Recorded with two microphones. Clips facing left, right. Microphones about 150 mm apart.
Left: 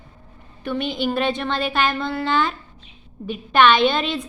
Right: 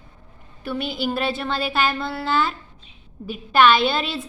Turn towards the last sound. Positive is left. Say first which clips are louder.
# left 3 dB
turn(degrees=-5)  # may be behind; listen again after turning